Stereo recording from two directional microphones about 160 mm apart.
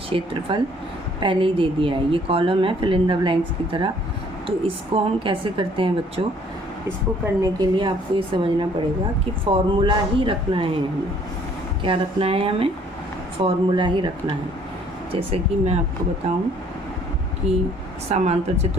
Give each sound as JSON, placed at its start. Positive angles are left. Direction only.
{"t": 0.1, "sound": "a woman's voice", "side_deg": -35}
{"t": 7.4, "sound": "a woman's voice", "side_deg": -25}
{"t": 11.8, "sound": "a woman's voice", "side_deg": -35}
{"t": 15.1, "sound": "a woman's voice", "side_deg": -40}
{"t": 17.4, "sound": "a woman's voice", "side_deg": -40}